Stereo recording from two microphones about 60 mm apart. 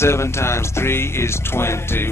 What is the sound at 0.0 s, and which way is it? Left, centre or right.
Speech, left.